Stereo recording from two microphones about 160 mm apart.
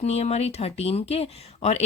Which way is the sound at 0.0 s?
40° left (ahead or behind).